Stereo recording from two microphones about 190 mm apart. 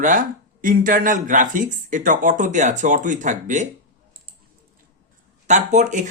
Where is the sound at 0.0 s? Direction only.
45° right (ahead or behind).